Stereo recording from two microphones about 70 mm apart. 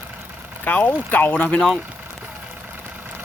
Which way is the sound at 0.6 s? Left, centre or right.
Left.